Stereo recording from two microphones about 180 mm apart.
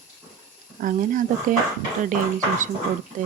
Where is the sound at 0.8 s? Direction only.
50° right (ahead or behind).